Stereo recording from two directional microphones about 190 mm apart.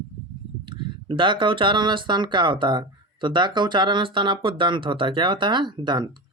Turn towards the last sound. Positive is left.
turn(degrees=-25)  # may be behind; listen again after turning